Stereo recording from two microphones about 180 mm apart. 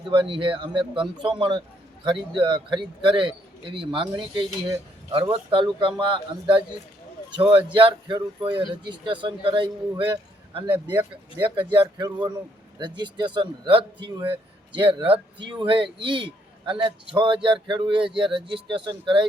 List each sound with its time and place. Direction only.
0.1 s a man's voice: 30° right (ahead or behind)
11.7 s a man's voice: 25° right (ahead or behind)